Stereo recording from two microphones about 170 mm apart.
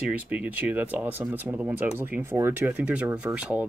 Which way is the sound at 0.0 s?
10° right (ahead or behind).